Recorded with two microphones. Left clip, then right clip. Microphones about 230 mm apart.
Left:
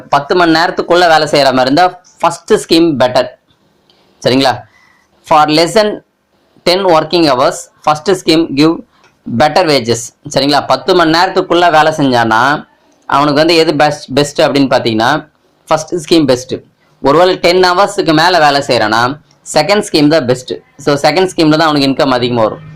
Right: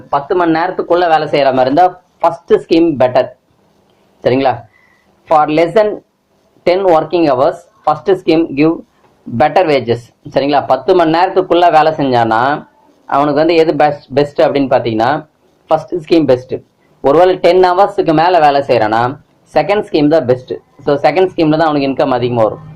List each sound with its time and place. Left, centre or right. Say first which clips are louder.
0.1 s speech: left 3 dB; left